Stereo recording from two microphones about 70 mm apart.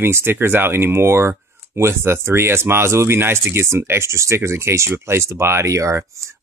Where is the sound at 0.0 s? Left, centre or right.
Right.